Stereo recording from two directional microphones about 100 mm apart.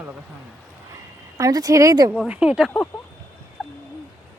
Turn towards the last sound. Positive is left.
turn(degrees=0)  # may be behind; listen again after turning